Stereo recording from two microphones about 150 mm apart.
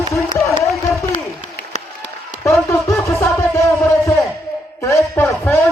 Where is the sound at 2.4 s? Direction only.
20° left (ahead or behind).